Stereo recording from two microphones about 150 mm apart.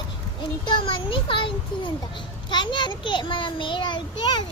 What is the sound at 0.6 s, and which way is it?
A child's voice, 35° left (ahead or behind).